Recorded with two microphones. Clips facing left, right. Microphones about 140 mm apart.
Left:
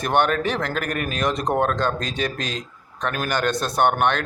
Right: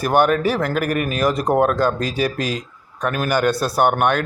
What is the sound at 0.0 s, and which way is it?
A man's voice, 5° right (ahead or behind).